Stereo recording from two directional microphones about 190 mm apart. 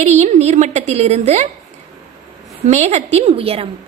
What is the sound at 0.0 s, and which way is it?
A woman's voice, 35° right (ahead or behind).